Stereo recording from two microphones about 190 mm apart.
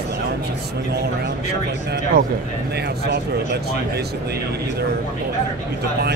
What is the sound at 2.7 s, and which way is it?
Speech, 60° right (ahead or behind).